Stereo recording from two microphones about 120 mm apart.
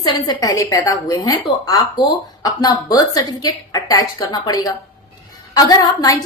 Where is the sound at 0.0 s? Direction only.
35° left (ahead or behind).